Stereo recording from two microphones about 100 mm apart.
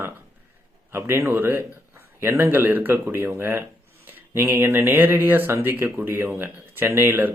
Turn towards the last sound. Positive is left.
turn(degrees=-20)  # may be behind; listen again after turning